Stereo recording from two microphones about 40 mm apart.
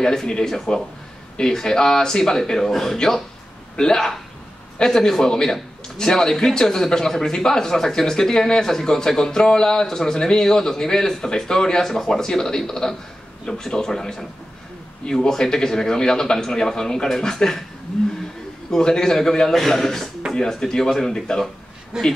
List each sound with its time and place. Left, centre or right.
0.0 s a man's voice: centre
11.8 s a man's voice: centre
18.7 s a man's voice: centre
19.5 s a man's voice: centre
21.9 s speech: centre